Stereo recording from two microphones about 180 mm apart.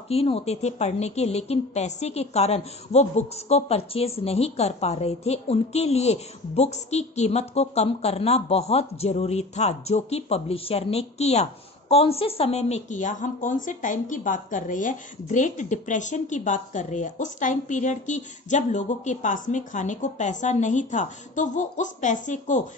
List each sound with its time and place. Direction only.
0.1 s a woman's voice: 35° left (ahead or behind)